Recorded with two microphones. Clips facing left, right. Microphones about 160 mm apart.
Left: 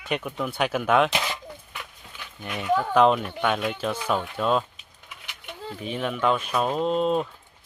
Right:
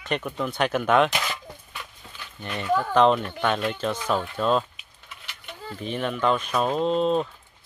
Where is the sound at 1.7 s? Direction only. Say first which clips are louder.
Even; 15° left (ahead or behind).